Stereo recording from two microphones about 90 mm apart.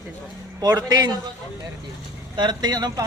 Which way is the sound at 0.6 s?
45° right (ahead or behind).